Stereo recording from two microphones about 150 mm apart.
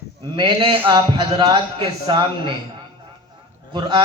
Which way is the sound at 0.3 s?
35° right (ahead or behind).